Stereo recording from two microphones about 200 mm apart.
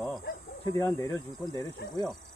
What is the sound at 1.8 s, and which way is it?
Speech, 55° left (ahead or behind).